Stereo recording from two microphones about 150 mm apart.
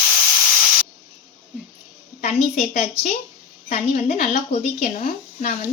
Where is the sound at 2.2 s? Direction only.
50° left (ahead or behind).